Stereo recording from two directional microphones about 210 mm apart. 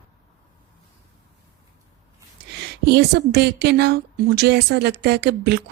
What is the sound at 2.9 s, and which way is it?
Speech, 50° right (ahead or behind).